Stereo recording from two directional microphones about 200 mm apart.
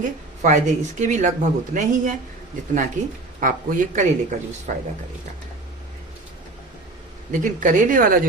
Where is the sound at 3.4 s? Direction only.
40° right (ahead or behind).